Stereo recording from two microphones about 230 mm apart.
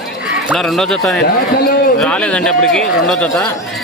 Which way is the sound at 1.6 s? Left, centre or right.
Left.